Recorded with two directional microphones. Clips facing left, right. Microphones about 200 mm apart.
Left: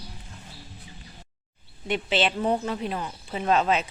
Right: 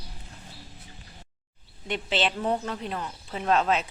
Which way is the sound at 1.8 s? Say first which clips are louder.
Left 3 dB; 5° left (ahead or behind).